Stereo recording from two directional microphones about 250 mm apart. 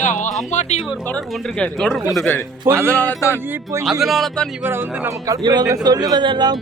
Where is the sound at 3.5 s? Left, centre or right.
Centre.